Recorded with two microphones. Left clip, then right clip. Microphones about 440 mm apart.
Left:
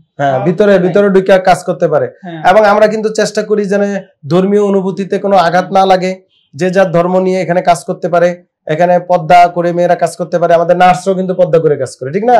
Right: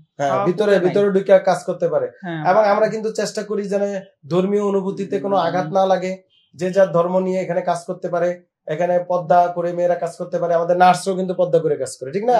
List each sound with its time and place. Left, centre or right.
0.2 s a man's voice: left
10.8 s a man's voice: left